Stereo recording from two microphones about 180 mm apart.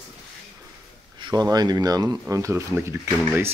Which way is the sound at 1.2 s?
20° right (ahead or behind).